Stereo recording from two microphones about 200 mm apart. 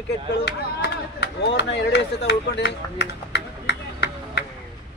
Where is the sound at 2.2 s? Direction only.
55° left (ahead or behind).